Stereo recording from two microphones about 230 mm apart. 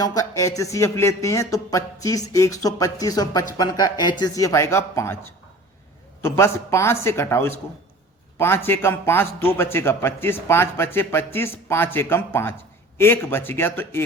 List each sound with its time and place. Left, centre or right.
0.0 s speech: centre
6.2 s speech: centre